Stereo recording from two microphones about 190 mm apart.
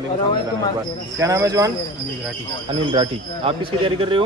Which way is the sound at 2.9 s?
30° right (ahead or behind).